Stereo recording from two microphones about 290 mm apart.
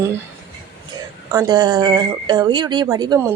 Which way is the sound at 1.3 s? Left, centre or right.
Centre.